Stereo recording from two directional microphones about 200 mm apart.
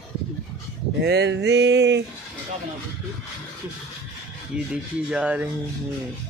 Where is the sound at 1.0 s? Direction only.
60° right (ahead or behind).